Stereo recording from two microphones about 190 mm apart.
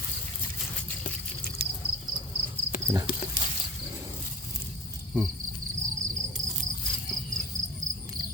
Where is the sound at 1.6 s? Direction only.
55° right (ahead or behind).